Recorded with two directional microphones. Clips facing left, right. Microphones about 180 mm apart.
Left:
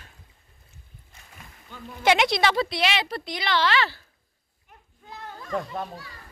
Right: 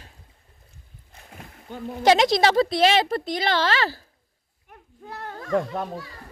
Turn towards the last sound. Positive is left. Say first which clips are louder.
# right 5 dB
turn(degrees=-50)  # may be behind; listen again after turning